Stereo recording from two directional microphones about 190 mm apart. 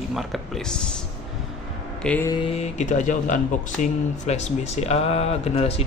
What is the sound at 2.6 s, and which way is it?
Speech, 40° left (ahead or behind).